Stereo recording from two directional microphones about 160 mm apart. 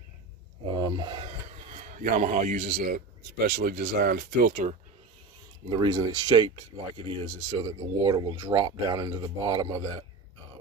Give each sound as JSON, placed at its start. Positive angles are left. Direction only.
{"t": 0.7, "sound": "speech", "side_deg": -25}
{"t": 1.2, "sound": "a sound", "side_deg": -45}
{"t": 3.3, "sound": "speech", "side_deg": -85}
{"t": 5.7, "sound": "speech", "side_deg": -30}